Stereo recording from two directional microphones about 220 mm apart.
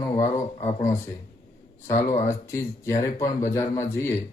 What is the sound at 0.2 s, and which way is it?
Speech, 35° left (ahead or behind).